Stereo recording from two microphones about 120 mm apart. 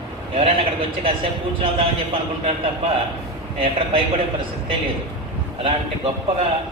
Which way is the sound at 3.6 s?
50° right (ahead or behind).